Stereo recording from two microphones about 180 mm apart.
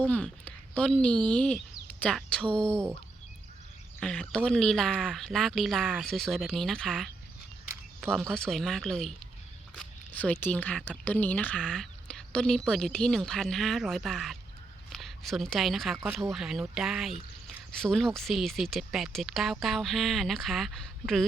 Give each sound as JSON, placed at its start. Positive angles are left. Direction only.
{"t": 0.0, "sound": "speech", "side_deg": 10}
{"t": 2.4, "sound": "speech", "side_deg": -30}
{"t": 4.0, "sound": "speech", "side_deg": 5}